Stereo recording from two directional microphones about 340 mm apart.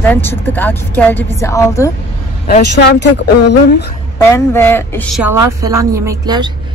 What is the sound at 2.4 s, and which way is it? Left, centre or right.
Speech, left.